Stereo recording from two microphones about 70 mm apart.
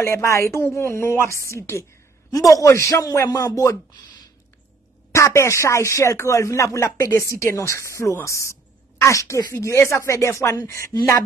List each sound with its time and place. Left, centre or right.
0.0 s speech: left
2.3 s speech: left
5.1 s speech: left